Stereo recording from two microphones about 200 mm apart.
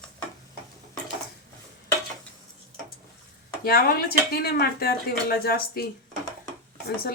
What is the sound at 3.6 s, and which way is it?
Speech, 50° left (ahead or behind).